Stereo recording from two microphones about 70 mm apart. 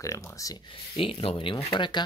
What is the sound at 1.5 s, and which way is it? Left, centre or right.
Speech, left.